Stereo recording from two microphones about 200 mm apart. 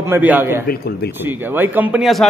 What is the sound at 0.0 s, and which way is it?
Speech, 10° right (ahead or behind).